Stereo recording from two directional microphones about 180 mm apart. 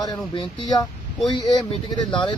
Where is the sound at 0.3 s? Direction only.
25° left (ahead or behind).